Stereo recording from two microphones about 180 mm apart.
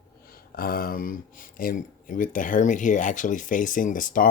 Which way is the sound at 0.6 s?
55° left (ahead or behind).